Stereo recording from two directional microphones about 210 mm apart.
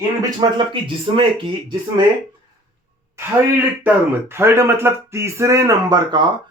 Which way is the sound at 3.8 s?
10° right (ahead or behind).